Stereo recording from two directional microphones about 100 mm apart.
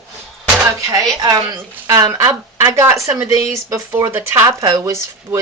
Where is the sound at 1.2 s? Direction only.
40° right (ahead or behind).